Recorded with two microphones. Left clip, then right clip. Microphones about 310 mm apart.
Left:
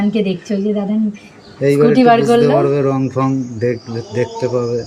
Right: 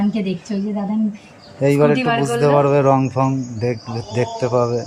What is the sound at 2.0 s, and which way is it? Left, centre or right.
Speech, left.